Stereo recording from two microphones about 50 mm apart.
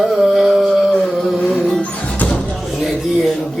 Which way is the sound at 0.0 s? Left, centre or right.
Centre.